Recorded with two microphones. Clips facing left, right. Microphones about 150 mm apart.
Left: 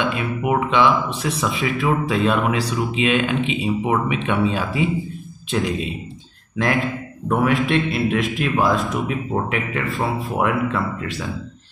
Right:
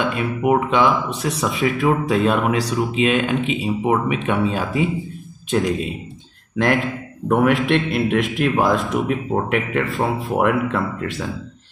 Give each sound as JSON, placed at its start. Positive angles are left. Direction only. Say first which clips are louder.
{"t": 0.1, "sound": "speech", "louder": "right 3 dB", "side_deg": -40}
{"t": 6.5, "sound": "a man's voice", "louder": "right 2 dB", "side_deg": -60}